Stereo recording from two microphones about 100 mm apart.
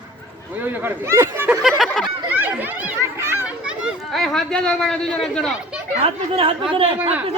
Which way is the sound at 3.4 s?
10° right (ahead or behind).